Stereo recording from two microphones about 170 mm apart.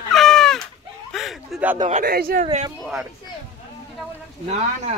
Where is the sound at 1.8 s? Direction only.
45° right (ahead or behind).